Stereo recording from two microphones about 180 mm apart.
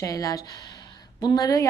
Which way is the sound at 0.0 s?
20° left (ahead or behind).